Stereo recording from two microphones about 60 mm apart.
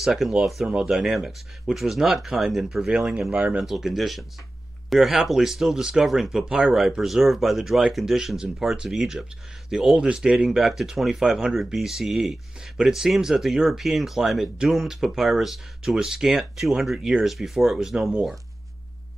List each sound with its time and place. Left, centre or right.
0.0 s speech: centre
3.2 s a man's voice: centre